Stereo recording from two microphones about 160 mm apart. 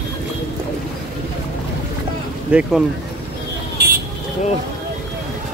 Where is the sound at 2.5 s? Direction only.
5° right (ahead or behind).